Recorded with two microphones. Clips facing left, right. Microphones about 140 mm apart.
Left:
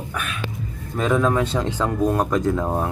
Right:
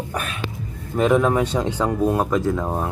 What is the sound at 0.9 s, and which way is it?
Speech, 15° right (ahead or behind).